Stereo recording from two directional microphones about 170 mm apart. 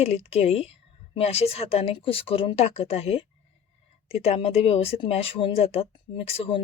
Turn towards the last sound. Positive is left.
turn(degrees=35)  # may be behind; listen again after turning